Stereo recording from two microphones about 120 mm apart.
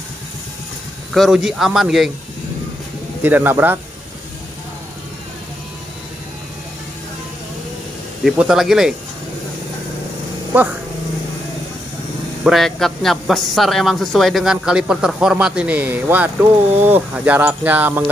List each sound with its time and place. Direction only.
1.1 s speech: centre (ahead or behind)
3.2 s mechanisms: 15° right (ahead or behind)
8.2 s speech: 5° right (ahead or behind)
10.5 s mechanisms: 15° right (ahead or behind)
12.4 s speech: centre (ahead or behind); by 16.3 s 15° right (ahead or behind)
16.8 s mechanisms: 15° right (ahead or behind)